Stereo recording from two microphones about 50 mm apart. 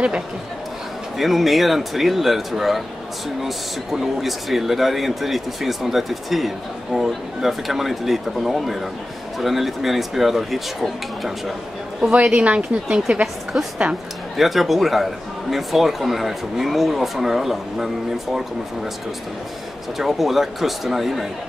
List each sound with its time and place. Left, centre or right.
1.1 s speech: centre
12.0 s a woman's voice: right
13.2 s speech: centre
20.0 s speech: centre